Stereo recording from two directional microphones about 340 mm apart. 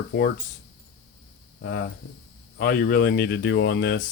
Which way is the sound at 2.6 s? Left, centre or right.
Left.